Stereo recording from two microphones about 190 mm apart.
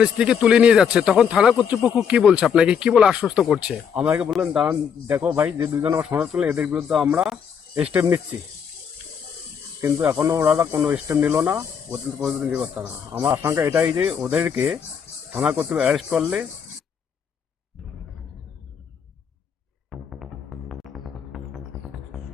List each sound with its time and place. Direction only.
0.0 s speech: 5° right (ahead or behind)
9.8 s speech: 10° right (ahead or behind)
10.8 s speech: 10° right (ahead or behind)
19.9 s music: centre (ahead or behind)